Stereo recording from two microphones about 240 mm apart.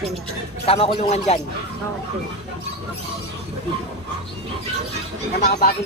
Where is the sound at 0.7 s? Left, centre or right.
Left.